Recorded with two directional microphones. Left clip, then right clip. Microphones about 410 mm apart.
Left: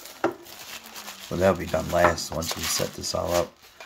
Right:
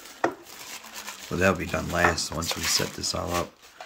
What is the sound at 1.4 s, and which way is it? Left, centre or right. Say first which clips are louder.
Speech: left 2 dB; centre.